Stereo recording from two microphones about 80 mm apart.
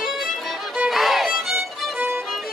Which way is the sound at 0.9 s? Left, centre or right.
Centre.